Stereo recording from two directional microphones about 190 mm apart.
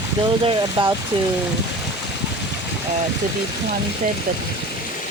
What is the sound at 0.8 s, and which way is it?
Speech, 30° right (ahead or behind).